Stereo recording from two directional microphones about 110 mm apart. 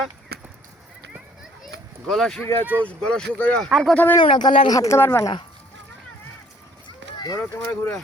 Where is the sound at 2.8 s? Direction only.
10° left (ahead or behind).